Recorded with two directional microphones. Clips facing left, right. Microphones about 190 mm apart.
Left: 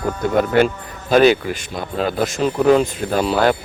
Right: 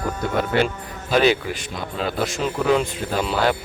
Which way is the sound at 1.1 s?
50° left (ahead or behind).